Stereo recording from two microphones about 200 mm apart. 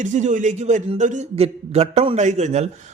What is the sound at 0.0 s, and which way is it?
Speech, 35° right (ahead or behind).